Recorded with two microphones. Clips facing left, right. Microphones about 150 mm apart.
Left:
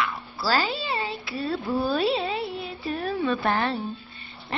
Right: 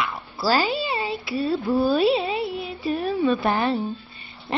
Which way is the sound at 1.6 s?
Centre (ahead or behind).